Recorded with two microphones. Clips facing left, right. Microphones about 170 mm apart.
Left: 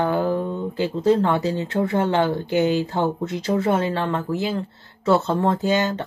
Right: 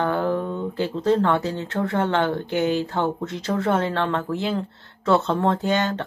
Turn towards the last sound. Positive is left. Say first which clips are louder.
# left 2 dB
turn(degrees=10)  # may be behind; listen again after turning